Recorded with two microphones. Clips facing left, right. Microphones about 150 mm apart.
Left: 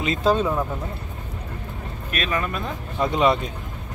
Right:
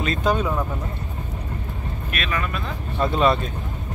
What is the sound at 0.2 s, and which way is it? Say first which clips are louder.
Speech: left 3 dB; 30° left (ahead or behind).